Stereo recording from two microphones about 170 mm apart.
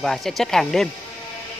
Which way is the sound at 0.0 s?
Centre (ahead or behind).